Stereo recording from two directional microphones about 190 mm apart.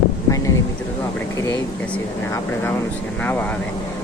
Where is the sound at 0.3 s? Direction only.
15° left (ahead or behind).